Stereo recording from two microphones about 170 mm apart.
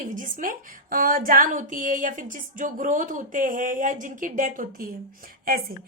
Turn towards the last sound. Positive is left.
turn(degrees=-60)  # may be behind; listen again after turning